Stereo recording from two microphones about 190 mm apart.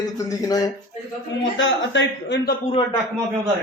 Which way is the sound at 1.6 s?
70° left (ahead or behind).